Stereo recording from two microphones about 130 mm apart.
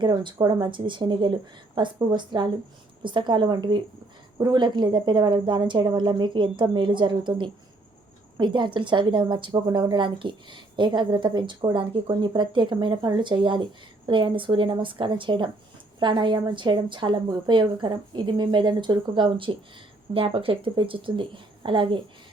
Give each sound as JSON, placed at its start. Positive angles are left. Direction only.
{"t": 0.0, "sound": "a woman's voice", "side_deg": -35}